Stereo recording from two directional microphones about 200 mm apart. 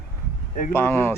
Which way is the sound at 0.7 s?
10° left (ahead or behind).